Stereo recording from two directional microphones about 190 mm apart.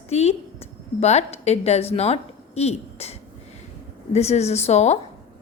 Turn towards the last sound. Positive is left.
turn(degrees=35)  # may be behind; listen again after turning